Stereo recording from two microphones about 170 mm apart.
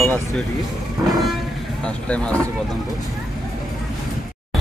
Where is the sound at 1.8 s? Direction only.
5° left (ahead or behind).